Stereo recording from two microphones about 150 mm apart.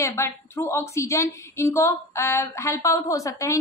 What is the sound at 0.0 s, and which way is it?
A woman's voice, 15° left (ahead or behind).